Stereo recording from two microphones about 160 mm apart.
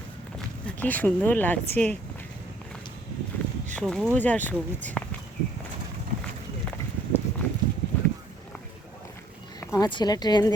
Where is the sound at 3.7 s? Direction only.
5° left (ahead or behind).